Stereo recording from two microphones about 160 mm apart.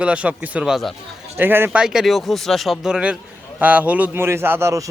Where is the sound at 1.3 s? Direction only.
15° right (ahead or behind).